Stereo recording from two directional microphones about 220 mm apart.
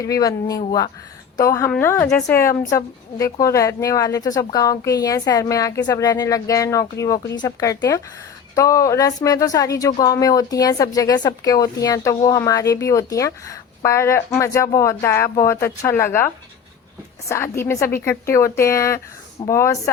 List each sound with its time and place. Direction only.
0.0 s speech: 15° left (ahead or behind)